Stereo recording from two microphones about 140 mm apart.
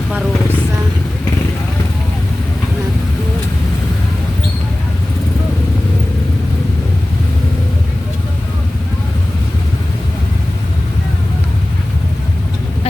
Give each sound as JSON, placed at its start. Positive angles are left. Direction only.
{"t": 0.1, "sound": "vehicle", "side_deg": -10}